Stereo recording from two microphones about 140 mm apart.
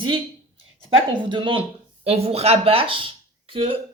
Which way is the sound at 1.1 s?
35° right (ahead or behind).